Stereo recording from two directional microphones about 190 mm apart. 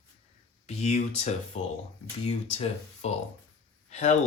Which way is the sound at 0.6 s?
35° left (ahead or behind).